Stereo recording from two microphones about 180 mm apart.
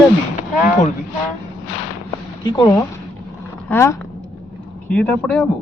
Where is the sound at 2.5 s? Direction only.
20° left (ahead or behind); by 5.5 s 5° left (ahead or behind).